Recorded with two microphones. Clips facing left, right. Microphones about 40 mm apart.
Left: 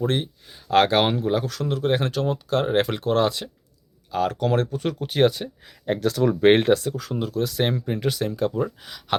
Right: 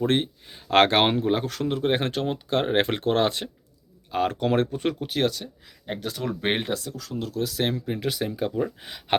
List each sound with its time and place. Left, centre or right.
0.0 s speech: right
4.9 s speech: centre
5.9 s speech: left
6.7 s speech: left
7.2 s speech: centre
8.8 s speech: right